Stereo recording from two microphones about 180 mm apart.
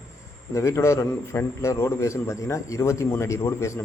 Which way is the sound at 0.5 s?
15° left (ahead or behind).